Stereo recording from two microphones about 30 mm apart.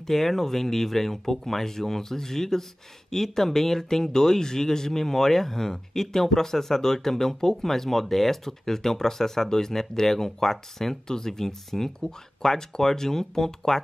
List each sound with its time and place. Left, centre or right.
0.0 s speech: centre